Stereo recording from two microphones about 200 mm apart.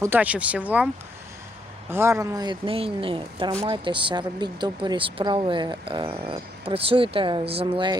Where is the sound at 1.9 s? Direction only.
15° right (ahead or behind).